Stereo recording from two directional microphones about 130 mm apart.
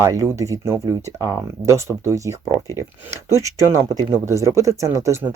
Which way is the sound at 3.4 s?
25° right (ahead or behind).